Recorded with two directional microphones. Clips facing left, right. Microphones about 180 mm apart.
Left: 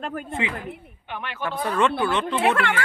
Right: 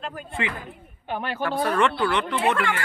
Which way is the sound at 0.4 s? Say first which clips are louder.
Even; 15° left (ahead or behind).